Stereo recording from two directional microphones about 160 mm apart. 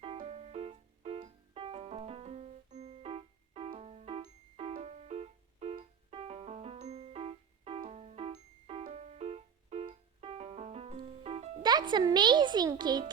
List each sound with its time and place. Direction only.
0.0 s music: 35° right (ahead or behind)
11.6 s a child's voice: 25° right (ahead or behind)